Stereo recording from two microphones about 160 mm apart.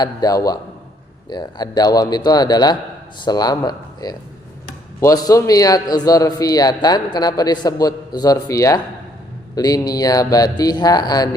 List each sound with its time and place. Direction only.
0.0 s a man's voice: 25° left (ahead or behind)